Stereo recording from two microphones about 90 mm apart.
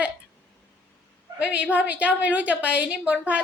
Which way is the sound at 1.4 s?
15° right (ahead or behind).